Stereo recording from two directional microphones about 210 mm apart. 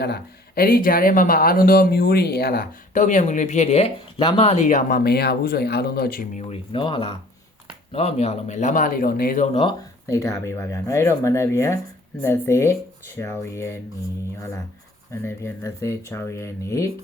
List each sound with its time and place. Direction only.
0.0 s speech: 45° left (ahead or behind)
6.5 s speech: 25° left (ahead or behind)